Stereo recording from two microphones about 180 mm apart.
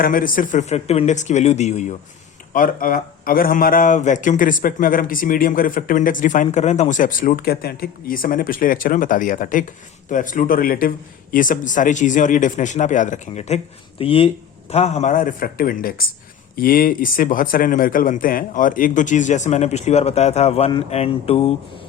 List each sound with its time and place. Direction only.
0.0 s speech: 50° left (ahead or behind); by 21.3 s 35° left (ahead or behind)